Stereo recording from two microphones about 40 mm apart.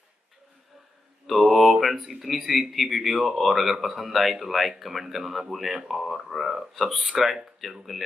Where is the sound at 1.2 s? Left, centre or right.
Centre.